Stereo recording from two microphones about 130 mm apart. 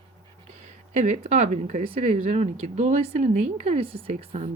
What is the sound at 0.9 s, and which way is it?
Speech, 60° right (ahead or behind).